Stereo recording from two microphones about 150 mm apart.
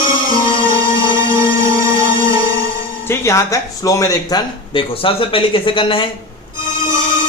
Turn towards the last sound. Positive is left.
turn(degrees=35)  # may be behind; listen again after turning